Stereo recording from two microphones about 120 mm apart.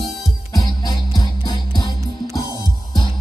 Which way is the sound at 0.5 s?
30° left (ahead or behind).